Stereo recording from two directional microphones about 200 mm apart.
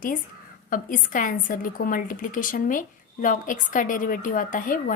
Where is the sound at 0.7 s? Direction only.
40° left (ahead or behind).